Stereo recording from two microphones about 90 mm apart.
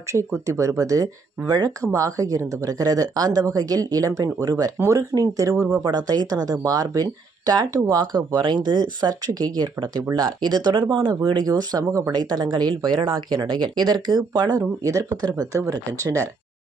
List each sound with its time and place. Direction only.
0.1 s speech: 35° right (ahead or behind)
5.9 s speech: 50° right (ahead or behind)
11.4 s speech: 45° right (ahead or behind)